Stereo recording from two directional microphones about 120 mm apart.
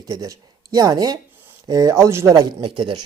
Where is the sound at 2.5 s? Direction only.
45° right (ahead or behind).